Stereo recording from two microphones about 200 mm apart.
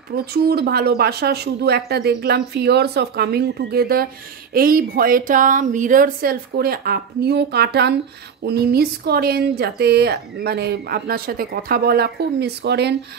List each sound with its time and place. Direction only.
0.1 s speech: 50° right (ahead or behind)